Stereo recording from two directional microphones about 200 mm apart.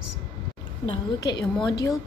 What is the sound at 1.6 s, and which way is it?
Speech, 20° left (ahead or behind).